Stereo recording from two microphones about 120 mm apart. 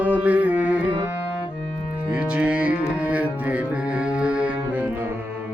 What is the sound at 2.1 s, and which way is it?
Music, 10° right (ahead or behind).